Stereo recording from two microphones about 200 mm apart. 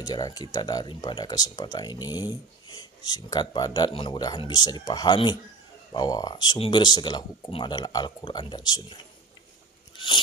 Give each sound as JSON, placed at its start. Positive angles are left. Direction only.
{"t": 0.0, "sound": "speech", "side_deg": 20}
{"t": 9.9, "sound": "biting", "side_deg": 25}